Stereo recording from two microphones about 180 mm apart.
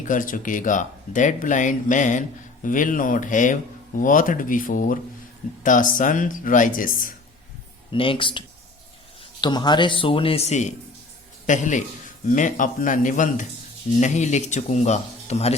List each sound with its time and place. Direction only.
0.0 s speech: 45° left (ahead or behind)
7.9 s a man's voice: 30° left (ahead or behind)